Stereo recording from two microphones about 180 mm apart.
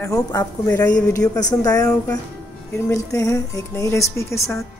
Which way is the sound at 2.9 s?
15° left (ahead or behind).